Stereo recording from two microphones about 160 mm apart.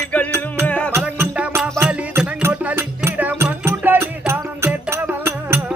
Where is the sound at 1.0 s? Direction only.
10° right (ahead or behind).